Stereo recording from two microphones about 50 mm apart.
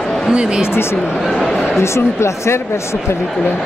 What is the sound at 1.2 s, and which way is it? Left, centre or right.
Speech, centre.